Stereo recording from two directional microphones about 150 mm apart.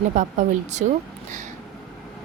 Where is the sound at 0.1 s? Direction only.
55° right (ahead or behind).